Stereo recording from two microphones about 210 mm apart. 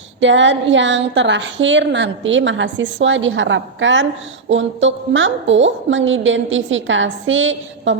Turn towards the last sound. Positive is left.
turn(degrees=-65)  # may be behind; listen again after turning